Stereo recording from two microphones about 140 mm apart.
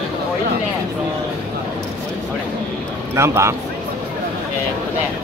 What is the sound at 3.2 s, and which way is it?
Speech, 20° right (ahead or behind).